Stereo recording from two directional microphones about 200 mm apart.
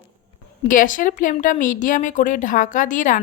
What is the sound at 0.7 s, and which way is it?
Speech, 40° left (ahead or behind).